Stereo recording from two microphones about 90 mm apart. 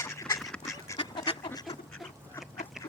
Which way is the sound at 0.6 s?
35° left (ahead or behind).